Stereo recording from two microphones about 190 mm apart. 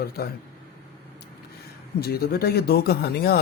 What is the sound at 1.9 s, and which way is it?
Speech, 55° left (ahead or behind).